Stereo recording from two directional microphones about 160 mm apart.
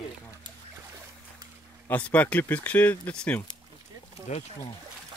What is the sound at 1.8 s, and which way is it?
Speech, 10° left (ahead or behind).